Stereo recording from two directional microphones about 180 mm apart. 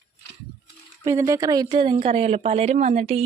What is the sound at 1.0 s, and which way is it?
Speech, 20° right (ahead or behind).